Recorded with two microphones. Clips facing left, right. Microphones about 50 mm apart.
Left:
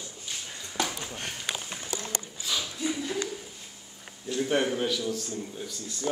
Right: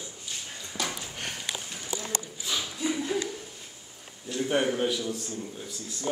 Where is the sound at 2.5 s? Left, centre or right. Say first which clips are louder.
Even; centre.